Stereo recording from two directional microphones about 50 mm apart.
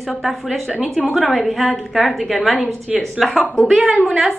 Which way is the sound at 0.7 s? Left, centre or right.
Right.